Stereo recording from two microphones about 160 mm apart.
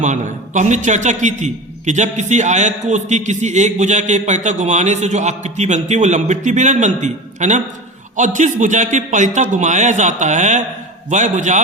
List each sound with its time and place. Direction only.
0.0 s a man's voice: 50° right (ahead or behind)